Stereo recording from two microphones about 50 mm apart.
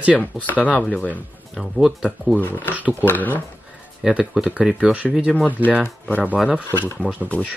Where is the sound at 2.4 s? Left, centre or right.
Left.